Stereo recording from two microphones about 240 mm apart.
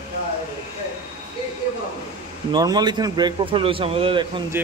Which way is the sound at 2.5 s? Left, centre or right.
Centre.